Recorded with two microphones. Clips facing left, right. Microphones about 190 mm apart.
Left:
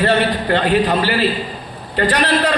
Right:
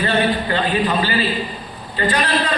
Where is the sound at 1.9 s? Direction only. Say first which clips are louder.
Left 3 dB; 75° left (ahead or behind).